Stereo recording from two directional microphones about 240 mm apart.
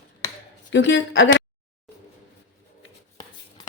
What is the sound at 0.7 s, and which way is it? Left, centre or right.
Speech, left.